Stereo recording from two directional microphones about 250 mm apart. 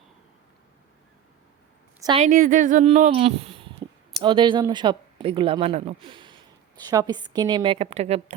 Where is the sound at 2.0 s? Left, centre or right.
Right.